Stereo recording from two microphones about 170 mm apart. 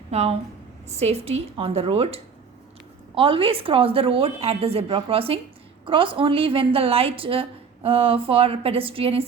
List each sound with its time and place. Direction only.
0.1 s a woman's voice: 40° right (ahead or behind)